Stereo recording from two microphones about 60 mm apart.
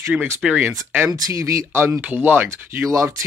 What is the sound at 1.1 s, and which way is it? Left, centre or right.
Speech, right.